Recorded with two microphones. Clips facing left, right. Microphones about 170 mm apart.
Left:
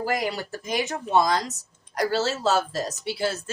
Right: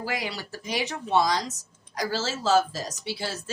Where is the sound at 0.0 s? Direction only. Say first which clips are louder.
Left 5 dB; 45° left (ahead or behind).